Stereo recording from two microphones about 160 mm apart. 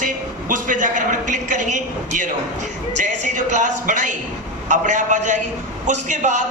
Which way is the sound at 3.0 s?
50° right (ahead or behind).